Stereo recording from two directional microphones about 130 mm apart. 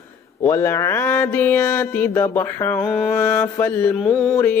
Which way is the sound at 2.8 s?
5° left (ahead or behind).